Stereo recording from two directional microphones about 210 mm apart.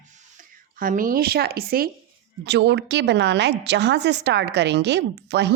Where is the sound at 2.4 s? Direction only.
55° right (ahead or behind).